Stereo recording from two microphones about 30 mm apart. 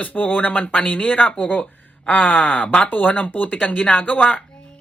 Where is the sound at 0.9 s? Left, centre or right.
Left.